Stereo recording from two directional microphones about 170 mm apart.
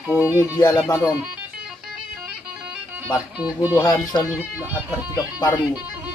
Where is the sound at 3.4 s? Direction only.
5° right (ahead or behind).